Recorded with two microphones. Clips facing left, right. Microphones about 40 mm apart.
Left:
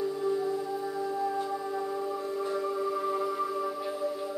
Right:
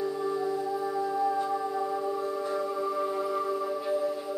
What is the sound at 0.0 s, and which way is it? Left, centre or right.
Music, centre.